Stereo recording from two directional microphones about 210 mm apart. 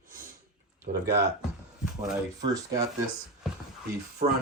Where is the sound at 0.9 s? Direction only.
45° right (ahead or behind).